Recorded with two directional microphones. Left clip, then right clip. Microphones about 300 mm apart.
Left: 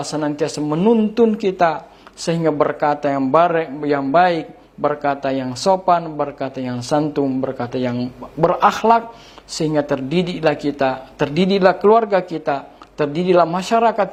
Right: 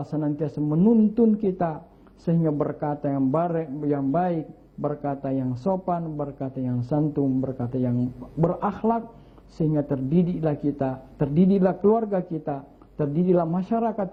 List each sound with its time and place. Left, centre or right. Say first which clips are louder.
0.1 s a man's voice: left 6 dB; centre
9.6 s a man's voice: left 7 dB; centre